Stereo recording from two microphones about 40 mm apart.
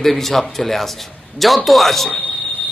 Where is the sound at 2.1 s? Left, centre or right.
Left.